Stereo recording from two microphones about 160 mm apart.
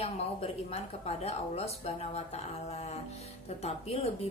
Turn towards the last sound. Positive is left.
turn(degrees=40)  # may be behind; listen again after turning